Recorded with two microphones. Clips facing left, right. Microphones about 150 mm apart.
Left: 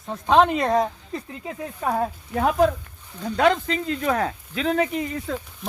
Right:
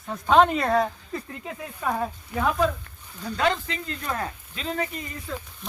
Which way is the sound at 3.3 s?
50° left (ahead or behind).